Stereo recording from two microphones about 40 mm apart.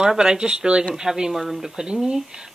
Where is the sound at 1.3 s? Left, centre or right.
Centre.